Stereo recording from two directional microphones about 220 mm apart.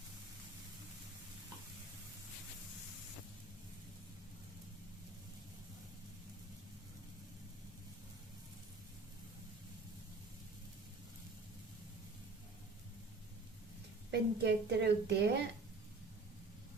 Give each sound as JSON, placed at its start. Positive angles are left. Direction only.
{"t": 14.1, "sound": "a woman's voice", "side_deg": -50}